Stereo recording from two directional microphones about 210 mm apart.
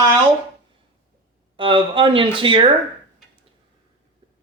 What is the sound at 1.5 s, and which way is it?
Speech, 25° right (ahead or behind).